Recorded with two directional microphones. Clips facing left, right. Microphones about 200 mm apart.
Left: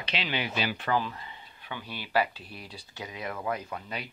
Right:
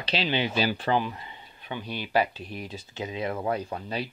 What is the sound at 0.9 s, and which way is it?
Speech, 20° right (ahead or behind).